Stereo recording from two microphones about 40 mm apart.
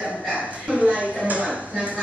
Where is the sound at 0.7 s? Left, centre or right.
Right.